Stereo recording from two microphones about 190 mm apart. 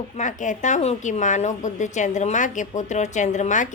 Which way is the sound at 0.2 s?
40° left (ahead or behind).